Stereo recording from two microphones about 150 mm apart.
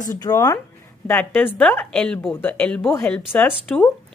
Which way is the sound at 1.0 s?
10° left (ahead or behind).